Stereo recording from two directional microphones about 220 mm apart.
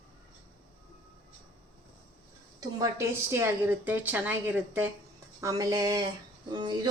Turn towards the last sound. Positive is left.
turn(degrees=-20)  # may be behind; listen again after turning